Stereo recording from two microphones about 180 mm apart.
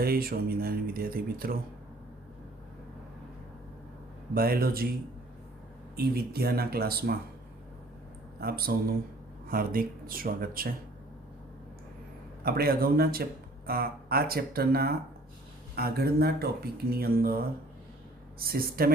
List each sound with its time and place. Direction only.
0.0 s speech: 55° right (ahead or behind)
4.4 s speech: 55° right (ahead or behind)
6.0 s speech: 60° right (ahead or behind)
8.4 s speech: 55° right (ahead or behind)
12.4 s speech: 60° right (ahead or behind)